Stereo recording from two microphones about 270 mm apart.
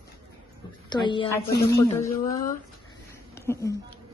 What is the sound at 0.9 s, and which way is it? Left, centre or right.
A woman's voice, centre.